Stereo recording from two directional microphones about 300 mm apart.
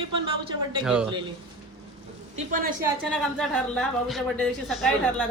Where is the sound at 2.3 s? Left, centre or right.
Right.